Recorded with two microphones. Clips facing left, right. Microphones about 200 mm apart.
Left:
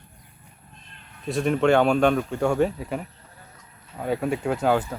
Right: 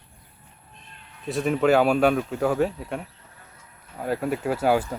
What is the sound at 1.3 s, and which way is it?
Speech, centre (ahead or behind).